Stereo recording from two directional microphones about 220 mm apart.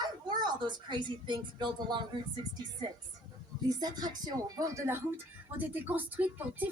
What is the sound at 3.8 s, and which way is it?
Speech, 20° right (ahead or behind).